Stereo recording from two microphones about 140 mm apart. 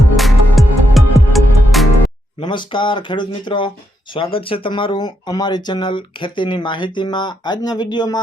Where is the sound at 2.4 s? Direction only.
35° left (ahead or behind).